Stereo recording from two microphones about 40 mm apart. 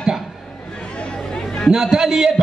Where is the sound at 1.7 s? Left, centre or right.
Centre.